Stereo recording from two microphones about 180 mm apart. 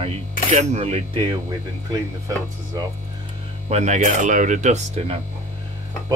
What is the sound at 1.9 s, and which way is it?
Speech, 20° right (ahead or behind).